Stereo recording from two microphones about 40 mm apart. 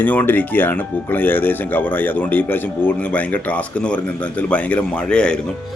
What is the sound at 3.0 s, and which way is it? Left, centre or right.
Speech, left.